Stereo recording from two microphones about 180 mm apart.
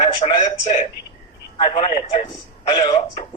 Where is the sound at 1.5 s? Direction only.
30° left (ahead or behind).